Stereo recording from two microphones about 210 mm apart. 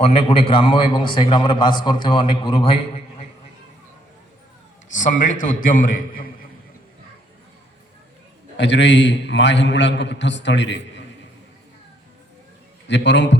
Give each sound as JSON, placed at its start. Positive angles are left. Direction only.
{"t": 0.0, "sound": "a man's voice", "side_deg": 30}
{"t": 4.9, "sound": "a man's voice", "side_deg": 40}
{"t": 8.5, "sound": "a man's voice", "side_deg": 55}
{"t": 12.9, "sound": "a man's voice", "side_deg": 55}